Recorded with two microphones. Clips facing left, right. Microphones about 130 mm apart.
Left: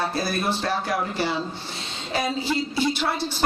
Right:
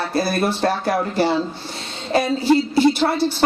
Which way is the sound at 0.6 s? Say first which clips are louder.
Right 6 dB; 45° right (ahead or behind).